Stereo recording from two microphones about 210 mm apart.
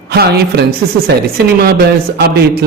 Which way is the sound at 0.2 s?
50° right (ahead or behind).